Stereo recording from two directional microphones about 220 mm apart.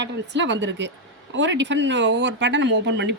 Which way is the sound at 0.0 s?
55° right (ahead or behind).